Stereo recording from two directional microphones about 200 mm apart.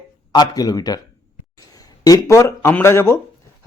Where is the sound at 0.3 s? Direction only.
20° left (ahead or behind).